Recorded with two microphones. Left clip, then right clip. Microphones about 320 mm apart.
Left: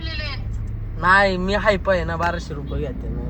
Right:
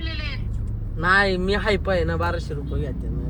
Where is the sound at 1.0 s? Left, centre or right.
Centre.